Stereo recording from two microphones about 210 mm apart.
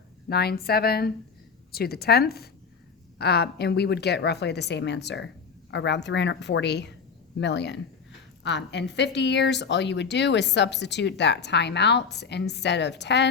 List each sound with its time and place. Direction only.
0.3 s a woman's voice: 50° left (ahead or behind)